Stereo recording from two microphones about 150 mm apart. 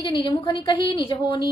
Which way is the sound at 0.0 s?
30° left (ahead or behind).